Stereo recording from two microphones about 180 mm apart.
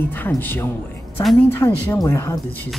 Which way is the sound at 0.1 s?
10° left (ahead or behind).